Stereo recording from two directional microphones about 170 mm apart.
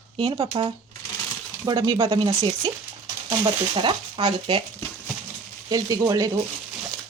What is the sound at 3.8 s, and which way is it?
Speech, 25° right (ahead or behind).